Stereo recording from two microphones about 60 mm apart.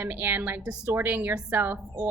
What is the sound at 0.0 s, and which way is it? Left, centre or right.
A woman's voice, right.